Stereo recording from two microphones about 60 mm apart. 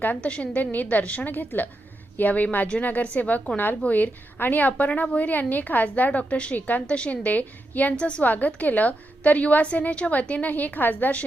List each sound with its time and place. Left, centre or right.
0.0 s a woman's voice: left